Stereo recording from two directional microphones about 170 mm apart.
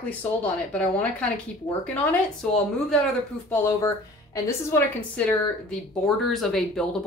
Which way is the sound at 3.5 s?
10° left (ahead or behind).